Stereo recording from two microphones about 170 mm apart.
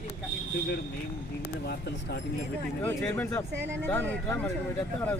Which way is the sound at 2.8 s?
15° left (ahead or behind).